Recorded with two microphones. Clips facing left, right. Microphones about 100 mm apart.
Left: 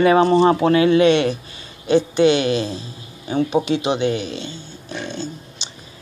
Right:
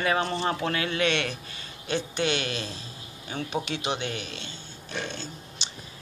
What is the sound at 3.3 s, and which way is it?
Speech, 25° left (ahead or behind).